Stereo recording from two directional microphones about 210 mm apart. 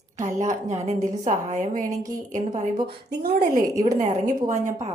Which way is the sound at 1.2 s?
40° right (ahead or behind).